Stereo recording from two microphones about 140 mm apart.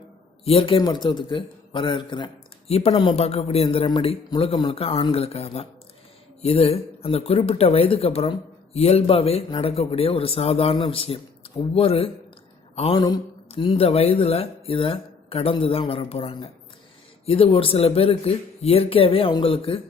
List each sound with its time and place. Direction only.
0.4 s a man's voice: 40° left (ahead or behind)
0.8 s a man's voice: 30° left (ahead or behind)
2.6 s a man's voice: 45° left (ahead or behind)
12.7 s a sound: 45° left (ahead or behind)
13.5 s speech: 40° left (ahead or behind)